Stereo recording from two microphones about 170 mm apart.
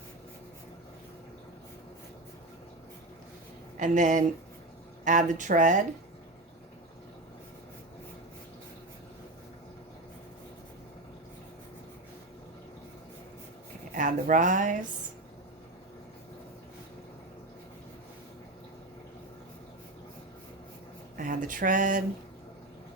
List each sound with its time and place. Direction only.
3.8 s speech: 50° right (ahead or behind)
13.9 s a woman's voice: 50° right (ahead or behind)
21.2 s a sound: 50° right (ahead or behind)